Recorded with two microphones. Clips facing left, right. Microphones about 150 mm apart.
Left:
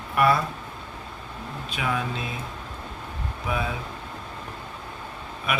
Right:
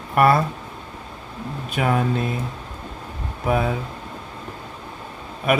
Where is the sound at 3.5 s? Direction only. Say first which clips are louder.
Right 8 dB; 45° right (ahead or behind).